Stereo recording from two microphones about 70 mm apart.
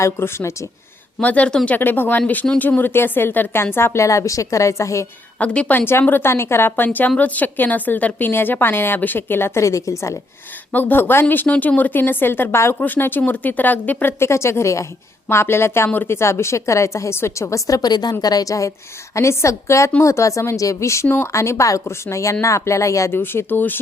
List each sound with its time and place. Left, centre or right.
0.0 s a woman's voice: left
1.2 s a woman's voice: left
5.4 s a woman's voice: centre
5.7 s a woman's voice: left
9.6 s a woman's voice: left
10.7 s a woman's voice: left